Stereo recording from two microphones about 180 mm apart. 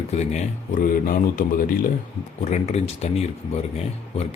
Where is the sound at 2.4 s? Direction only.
40° left (ahead or behind).